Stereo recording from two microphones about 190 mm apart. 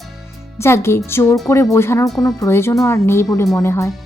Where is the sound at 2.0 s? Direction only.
Centre (ahead or behind).